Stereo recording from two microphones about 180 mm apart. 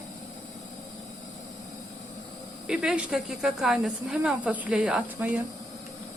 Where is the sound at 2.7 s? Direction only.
5° right (ahead or behind).